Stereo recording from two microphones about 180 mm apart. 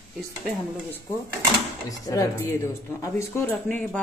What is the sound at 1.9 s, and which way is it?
Speech, 20° left (ahead or behind).